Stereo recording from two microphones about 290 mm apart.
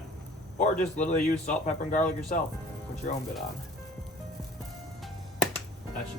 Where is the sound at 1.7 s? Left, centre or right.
Left.